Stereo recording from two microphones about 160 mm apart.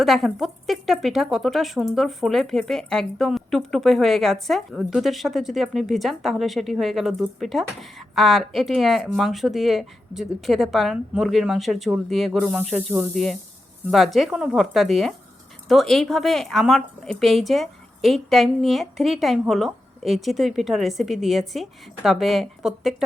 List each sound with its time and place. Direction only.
0.0 s speech: centre (ahead or behind)